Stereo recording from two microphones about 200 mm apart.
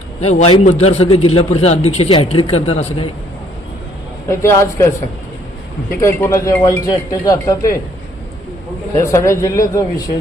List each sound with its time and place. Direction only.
0.2 s a man's voice: 30° left (ahead or behind)
4.3 s speech: 15° left (ahead or behind)
6.0 s speech: 15° left (ahead or behind)
9.0 s speech: 15° left (ahead or behind)